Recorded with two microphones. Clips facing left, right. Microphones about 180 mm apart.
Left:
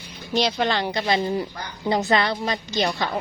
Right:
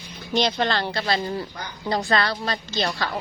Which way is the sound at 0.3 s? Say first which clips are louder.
Even; 5° left (ahead or behind).